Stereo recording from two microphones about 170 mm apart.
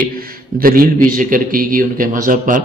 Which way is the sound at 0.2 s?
60° right (ahead or behind).